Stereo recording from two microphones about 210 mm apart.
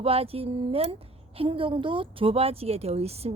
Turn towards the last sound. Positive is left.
turn(degrees=-30)  # may be behind; listen again after turning